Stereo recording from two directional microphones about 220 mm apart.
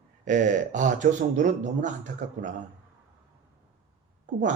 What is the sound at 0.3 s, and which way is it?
Speech, 35° right (ahead or behind).